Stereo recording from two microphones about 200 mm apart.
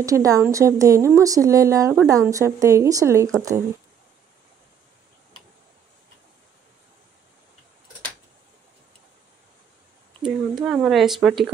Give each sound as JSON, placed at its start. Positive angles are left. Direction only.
{"t": 0.0, "sound": "a woman's voice", "side_deg": -15}
{"t": 10.2, "sound": "speech", "side_deg": -5}